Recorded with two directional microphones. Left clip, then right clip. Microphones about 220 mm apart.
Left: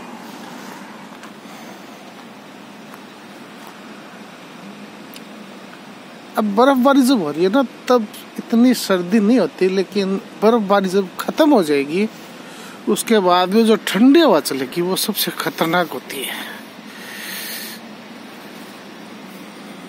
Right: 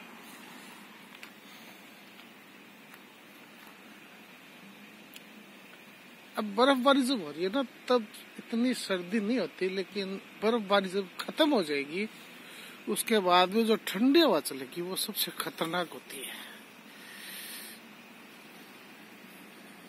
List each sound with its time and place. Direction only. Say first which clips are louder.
6.3 s speech: left 12 dB; 10° left (ahead or behind)